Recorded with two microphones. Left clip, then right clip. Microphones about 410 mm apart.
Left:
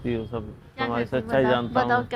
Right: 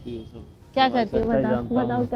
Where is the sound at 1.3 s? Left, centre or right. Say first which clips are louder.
Left 7 dB; left.